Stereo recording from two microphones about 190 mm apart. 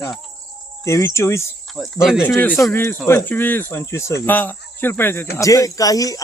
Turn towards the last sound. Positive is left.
turn(degrees=20)  # may be behind; listen again after turning